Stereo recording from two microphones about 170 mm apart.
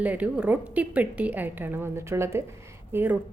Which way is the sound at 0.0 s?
10° right (ahead or behind).